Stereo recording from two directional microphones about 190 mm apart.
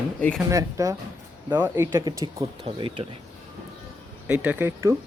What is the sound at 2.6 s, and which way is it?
Speech, 25° right (ahead or behind).